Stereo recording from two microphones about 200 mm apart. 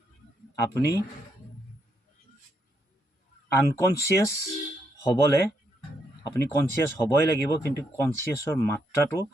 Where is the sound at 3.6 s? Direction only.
15° left (ahead or behind).